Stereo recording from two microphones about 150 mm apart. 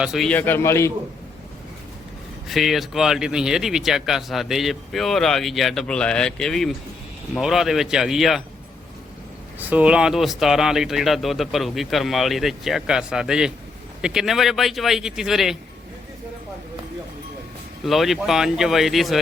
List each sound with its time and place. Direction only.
0.0 s speech: 5° right (ahead or behind)
0.3 s a man's voice: 10° left (ahead or behind)
2.5 s speech: centre (ahead or behind)
9.6 s speech: 10° right (ahead or behind)
17.8 s speech: centre (ahead or behind)